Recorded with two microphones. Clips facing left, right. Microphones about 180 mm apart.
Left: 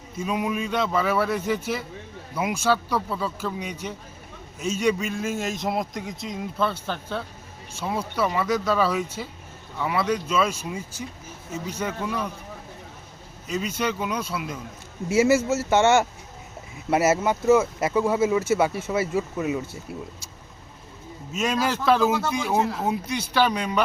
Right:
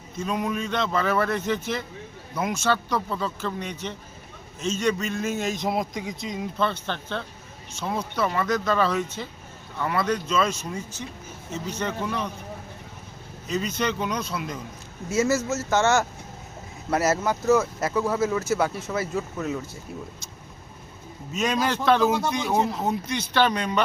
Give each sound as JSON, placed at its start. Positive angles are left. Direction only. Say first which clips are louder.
{"t": 0.2, "sound": "a man's voice", "louder": "left 1 dB", "side_deg": 5}
{"t": 13.5, "sound": "speech", "louder": "even", "side_deg": 5}
{"t": 15.4, "sound": "speech", "louder": "left 3 dB", "side_deg": 30}
{"t": 16.9, "sound": "a man's voice", "louder": "left 2 dB", "side_deg": 5}
{"t": 21.3, "sound": "a man's voice", "louder": "even", "side_deg": 5}